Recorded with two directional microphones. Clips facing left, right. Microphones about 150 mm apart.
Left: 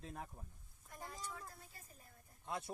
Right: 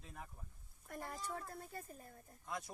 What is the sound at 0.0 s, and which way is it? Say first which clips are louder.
Speech: left 4 dB; 35° left (ahead or behind).